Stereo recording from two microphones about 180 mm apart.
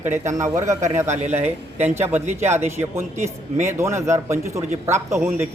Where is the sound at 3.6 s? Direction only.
15° right (ahead or behind).